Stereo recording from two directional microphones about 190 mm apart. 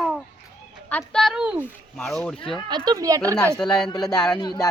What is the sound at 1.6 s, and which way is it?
Speech, 5° left (ahead or behind).